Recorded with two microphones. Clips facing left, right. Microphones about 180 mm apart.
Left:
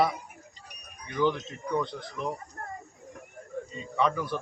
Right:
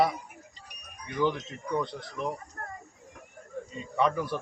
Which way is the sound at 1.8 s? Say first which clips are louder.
Even; 5° right (ahead or behind).